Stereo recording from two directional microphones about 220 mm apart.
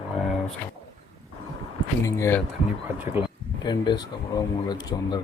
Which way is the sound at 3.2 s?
10° right (ahead or behind).